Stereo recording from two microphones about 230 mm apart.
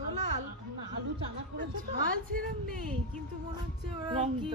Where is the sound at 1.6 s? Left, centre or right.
Right.